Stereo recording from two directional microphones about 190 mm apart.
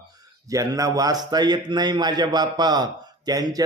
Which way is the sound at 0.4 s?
15° right (ahead or behind).